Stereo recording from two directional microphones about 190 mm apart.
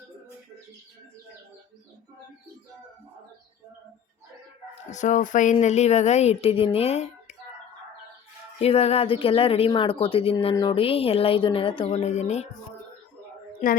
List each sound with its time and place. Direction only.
4.9 s speech: 40° left (ahead or behind)
8.5 s speech: 30° left (ahead or behind)